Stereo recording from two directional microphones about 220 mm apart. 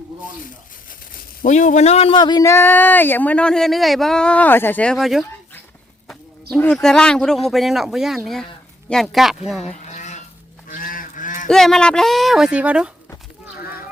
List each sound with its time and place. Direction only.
1.4 s a man's voice: 35° left (ahead or behind); by 5.2 s centre (ahead or behind)
6.5 s speech: 5° left (ahead or behind)
9.8 s livestock: 30° left (ahead or behind)
10.7 s goose: 40° left (ahead or behind)
11.4 s speech: centre (ahead or behind)
13.6 s a sound: 45° left (ahead or behind)